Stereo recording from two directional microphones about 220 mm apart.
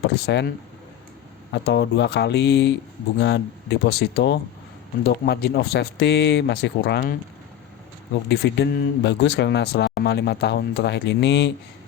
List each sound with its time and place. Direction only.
0.3 s speech: 50° left (ahead or behind)
1.5 s speech: 50° left (ahead or behind)
8.3 s speech: 50° left (ahead or behind)